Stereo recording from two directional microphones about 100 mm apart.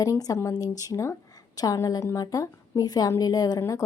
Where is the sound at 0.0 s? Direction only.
35° left (ahead or behind).